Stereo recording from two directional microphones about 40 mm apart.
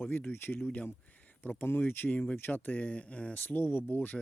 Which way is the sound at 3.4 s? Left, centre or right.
Left.